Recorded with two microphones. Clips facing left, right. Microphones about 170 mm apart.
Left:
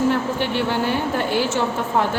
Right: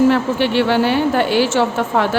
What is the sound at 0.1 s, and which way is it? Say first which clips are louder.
A woman's voice: right 5 dB; 90° right.